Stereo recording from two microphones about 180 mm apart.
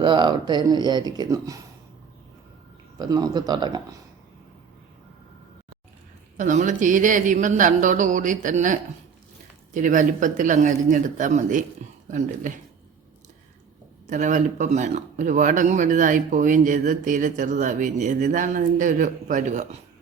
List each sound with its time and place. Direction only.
0.0 s speech: 25° right (ahead or behind)
3.0 s speech: 20° right (ahead or behind)
6.3 s speech: 45° right (ahead or behind)
14.1 s speech: 45° right (ahead or behind)